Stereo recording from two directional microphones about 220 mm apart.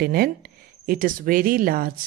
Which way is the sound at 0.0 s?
45° right (ahead or behind).